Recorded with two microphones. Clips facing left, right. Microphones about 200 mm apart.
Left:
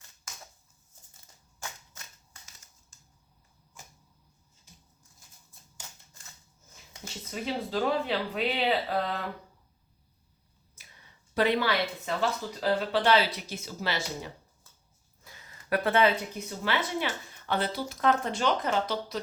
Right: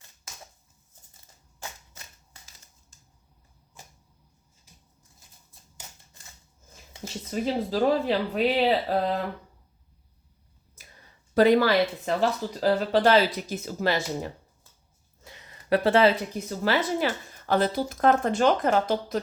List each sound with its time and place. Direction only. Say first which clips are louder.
7.0 s speech: right 7 dB; 40° right (ahead or behind)
11.3 s speech: right 7 dB; 40° right (ahead or behind)
15.2 s speech: right 4 dB; 25° right (ahead or behind); by 19.2 s 50° right (ahead or behind)